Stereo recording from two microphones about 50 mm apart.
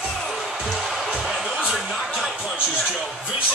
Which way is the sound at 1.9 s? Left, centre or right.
Centre.